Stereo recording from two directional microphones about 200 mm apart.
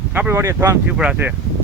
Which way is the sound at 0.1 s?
10° right (ahead or behind).